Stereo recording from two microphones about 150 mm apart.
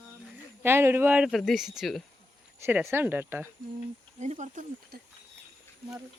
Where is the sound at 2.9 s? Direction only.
15° right (ahead or behind).